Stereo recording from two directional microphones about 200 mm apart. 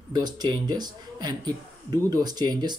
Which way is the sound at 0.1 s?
20° right (ahead or behind).